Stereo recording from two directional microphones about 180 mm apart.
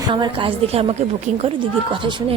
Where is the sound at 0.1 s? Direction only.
30° right (ahead or behind).